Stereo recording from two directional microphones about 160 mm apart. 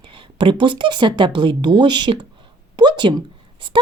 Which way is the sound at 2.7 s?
30° right (ahead or behind).